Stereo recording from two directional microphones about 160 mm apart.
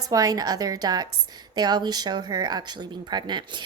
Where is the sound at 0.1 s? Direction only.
25° right (ahead or behind).